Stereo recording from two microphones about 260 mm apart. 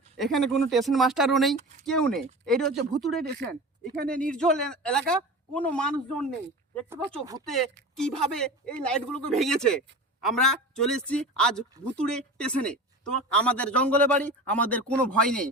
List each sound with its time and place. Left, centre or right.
0.2 s a woman's voice: centre
3.2 s speech: right
4.0 s a woman's voice: centre
7.2 s speech: centre
7.4 s a woman's voice: centre